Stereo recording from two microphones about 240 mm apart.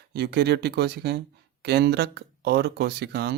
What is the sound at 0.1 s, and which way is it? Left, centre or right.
Speech, right.